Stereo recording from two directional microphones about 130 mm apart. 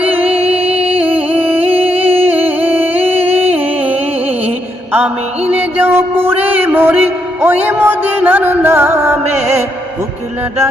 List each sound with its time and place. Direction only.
0.0 s music: 15° right (ahead or behind)
0.4 s music: 50° right (ahead or behind)
1.3 s music: 15° right (ahead or behind)
4.9 s music: 15° right (ahead or behind)